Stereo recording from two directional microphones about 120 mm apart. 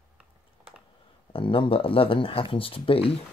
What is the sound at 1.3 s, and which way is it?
Speech, 50° left (ahead or behind).